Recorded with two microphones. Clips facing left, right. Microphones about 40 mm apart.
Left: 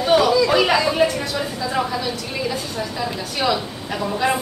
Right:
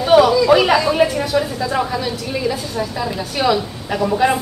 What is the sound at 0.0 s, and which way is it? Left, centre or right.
A woman's voice, centre.